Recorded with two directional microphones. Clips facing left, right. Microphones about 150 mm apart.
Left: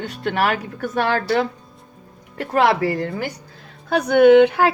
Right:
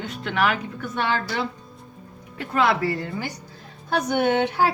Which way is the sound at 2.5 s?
90° left.